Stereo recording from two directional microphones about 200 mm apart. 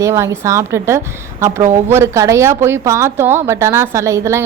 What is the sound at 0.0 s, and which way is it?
A woman's voice, 15° right (ahead or behind).